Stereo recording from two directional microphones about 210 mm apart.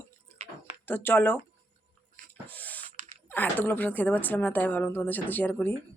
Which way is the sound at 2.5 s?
10° left (ahead or behind).